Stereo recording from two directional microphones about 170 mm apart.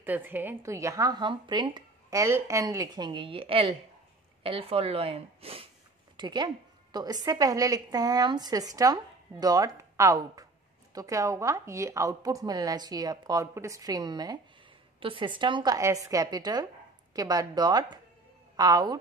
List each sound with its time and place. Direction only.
0.0 s a woman's voice: 10° right (ahead or behind)